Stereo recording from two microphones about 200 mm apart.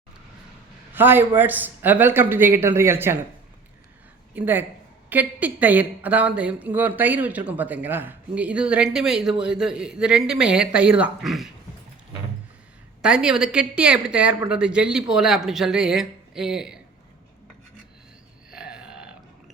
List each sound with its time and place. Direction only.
0.9 s a man's voice: 10° right (ahead or behind)
4.4 s speech: 10° right (ahead or behind)
13.0 s speech: 5° right (ahead or behind)
18.5 s burping: 5° right (ahead or behind)